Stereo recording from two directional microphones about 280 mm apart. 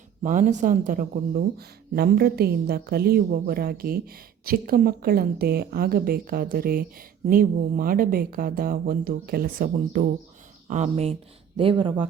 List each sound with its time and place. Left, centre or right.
0.2 s speech: right